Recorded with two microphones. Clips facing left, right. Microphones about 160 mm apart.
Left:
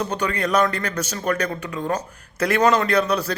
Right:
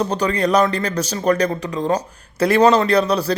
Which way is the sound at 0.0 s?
35° right (ahead or behind).